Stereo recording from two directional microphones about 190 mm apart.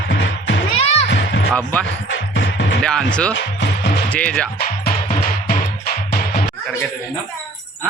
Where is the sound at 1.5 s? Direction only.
5° left (ahead or behind).